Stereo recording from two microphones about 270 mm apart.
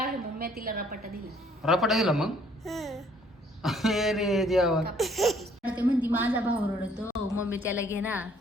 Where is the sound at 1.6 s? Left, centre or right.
Centre.